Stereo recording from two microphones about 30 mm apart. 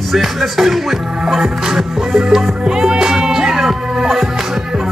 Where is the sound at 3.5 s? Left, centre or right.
Centre.